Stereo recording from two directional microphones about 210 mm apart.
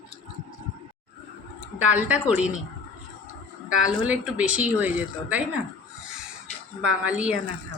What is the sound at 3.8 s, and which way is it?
Speech, 5° right (ahead or behind).